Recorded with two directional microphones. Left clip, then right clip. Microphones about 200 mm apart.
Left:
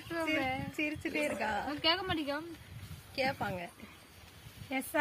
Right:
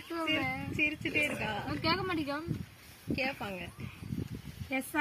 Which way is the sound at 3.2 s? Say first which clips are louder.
Left 3 dB; 25° left (ahead or behind).